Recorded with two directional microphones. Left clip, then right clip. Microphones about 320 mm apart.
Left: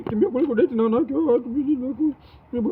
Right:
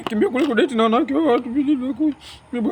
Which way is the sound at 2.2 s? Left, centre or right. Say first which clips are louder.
Right 1 dB; centre.